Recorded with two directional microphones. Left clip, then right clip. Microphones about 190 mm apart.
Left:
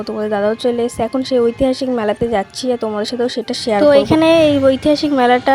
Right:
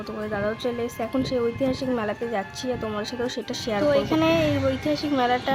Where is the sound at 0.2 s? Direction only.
30° left (ahead or behind).